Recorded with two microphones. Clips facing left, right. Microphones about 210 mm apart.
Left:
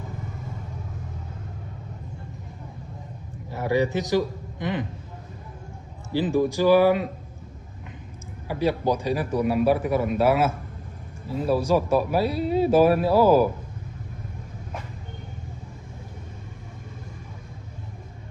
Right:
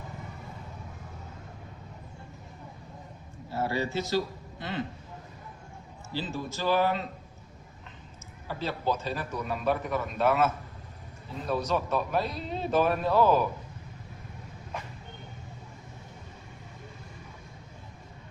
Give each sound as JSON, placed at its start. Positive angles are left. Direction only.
{"t": 3.5, "sound": "speech", "side_deg": 15}
{"t": 6.1, "sound": "speech", "side_deg": 15}
{"t": 8.4, "sound": "speech", "side_deg": 10}